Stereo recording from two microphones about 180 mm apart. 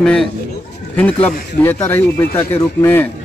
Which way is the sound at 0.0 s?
5° left (ahead or behind).